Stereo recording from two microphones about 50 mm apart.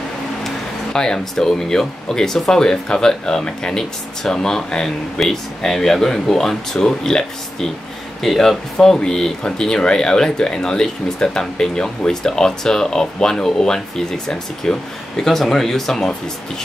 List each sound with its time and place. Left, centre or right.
0.9 s speech: centre
5.2 s speech: centre